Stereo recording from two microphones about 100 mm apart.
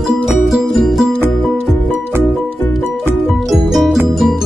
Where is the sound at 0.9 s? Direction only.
Centre (ahead or behind).